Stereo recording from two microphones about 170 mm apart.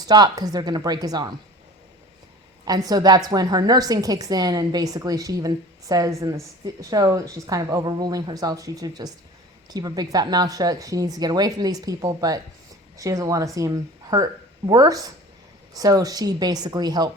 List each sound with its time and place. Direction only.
0.0 s a woman's voice: 25° right (ahead or behind)
2.6 s a woman's voice: 25° right (ahead or behind)